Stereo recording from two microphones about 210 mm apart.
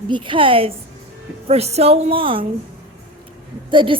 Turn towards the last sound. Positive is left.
turn(degrees=-25)  # may be behind; listen again after turning